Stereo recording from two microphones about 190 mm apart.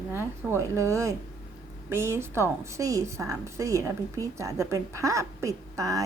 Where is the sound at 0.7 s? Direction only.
15° right (ahead or behind).